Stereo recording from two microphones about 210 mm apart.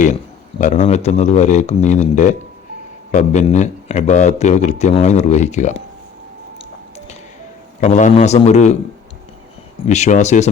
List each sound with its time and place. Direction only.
0.6 s speech: 35° left (ahead or behind)
7.8 s speech: 35° left (ahead or behind)
9.8 s speech: 35° left (ahead or behind)